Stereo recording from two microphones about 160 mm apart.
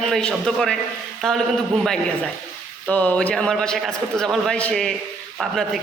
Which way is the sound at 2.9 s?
10° left (ahead or behind).